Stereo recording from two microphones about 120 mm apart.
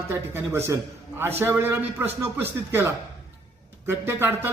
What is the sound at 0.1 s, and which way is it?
A man's voice, 20° right (ahead or behind).